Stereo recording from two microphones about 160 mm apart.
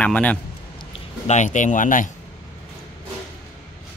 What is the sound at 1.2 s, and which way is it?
Speech, 50° left (ahead or behind).